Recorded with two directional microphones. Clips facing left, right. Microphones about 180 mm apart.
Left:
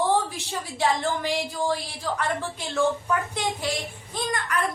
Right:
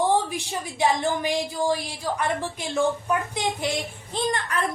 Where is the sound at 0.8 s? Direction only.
15° right (ahead or behind).